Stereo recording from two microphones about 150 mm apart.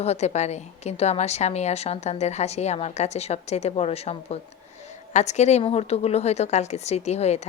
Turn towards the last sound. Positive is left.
turn(degrees=45)  # may be behind; listen again after turning